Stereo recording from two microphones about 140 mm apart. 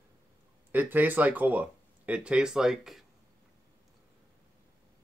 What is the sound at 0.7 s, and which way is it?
Speech, 15° right (ahead or behind).